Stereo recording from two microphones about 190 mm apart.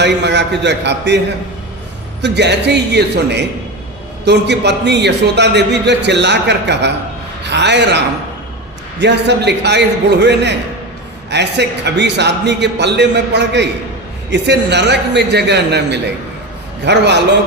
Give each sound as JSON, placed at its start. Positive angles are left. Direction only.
{"t": 0.0, "sound": "a man's voice", "side_deg": -65}
{"t": 2.2, "sound": "a man's voice", "side_deg": -65}